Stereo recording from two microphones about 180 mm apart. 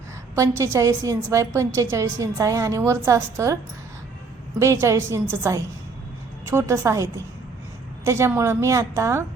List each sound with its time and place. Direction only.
0.3 s a woman's voice: 15° right (ahead or behind)
4.6 s a woman's voice: 15° right (ahead or behind)